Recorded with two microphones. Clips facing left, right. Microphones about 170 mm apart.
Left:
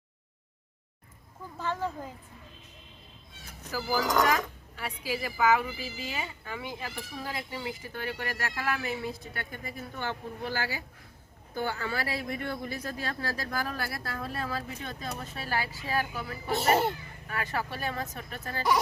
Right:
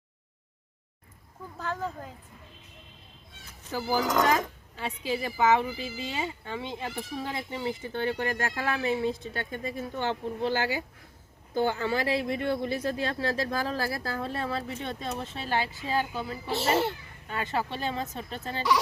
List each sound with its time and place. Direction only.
1.5 s speech: 5° left (ahead or behind)
3.7 s a woman's voice: 25° right (ahead or behind)
16.6 s a child's voice: 40° left (ahead or behind)
17.2 s a woman's voice: 25° right (ahead or behind)